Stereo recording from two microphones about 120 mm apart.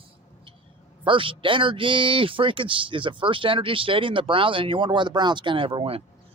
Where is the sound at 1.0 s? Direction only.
45° right (ahead or behind).